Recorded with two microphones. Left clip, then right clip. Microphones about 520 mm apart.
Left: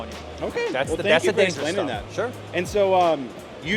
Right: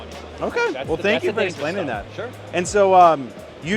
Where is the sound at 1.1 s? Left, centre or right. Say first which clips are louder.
Left 6 dB; left.